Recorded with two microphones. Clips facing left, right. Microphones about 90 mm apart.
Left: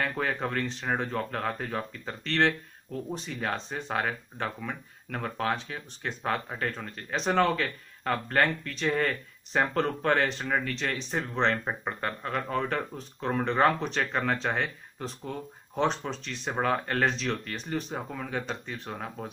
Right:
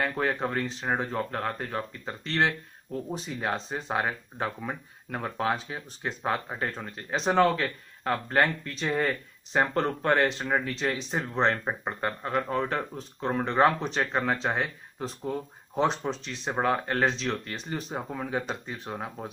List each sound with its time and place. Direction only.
0.0 s speech: 5° right (ahead or behind)
3.5 s speech: centre (ahead or behind)
3.9 s speech: 15° right (ahead or behind)
17.9 s speech: 15° right (ahead or behind)